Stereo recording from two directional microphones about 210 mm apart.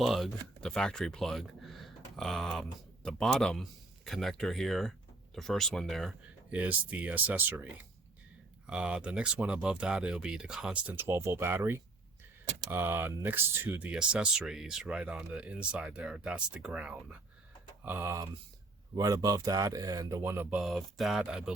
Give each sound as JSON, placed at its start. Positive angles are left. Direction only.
{"t": 0.0, "sound": "speech", "side_deg": 0}